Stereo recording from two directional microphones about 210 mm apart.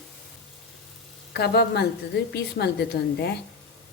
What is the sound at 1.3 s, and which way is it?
A woman's voice, 50° left (ahead or behind).